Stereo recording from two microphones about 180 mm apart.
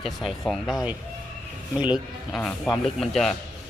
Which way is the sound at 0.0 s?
Centre (ahead or behind).